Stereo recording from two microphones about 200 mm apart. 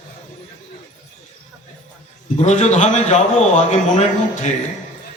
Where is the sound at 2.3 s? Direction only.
35° left (ahead or behind).